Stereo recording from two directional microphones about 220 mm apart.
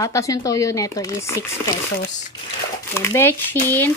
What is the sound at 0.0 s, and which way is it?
Speech, 15° left (ahead or behind).